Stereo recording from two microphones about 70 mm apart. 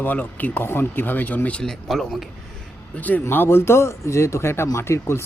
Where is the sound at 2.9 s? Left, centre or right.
Left.